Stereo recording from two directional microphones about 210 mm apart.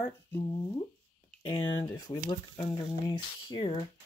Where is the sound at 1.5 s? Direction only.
20° left (ahead or behind).